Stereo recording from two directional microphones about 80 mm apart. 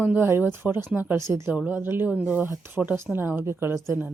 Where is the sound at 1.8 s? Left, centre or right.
Right.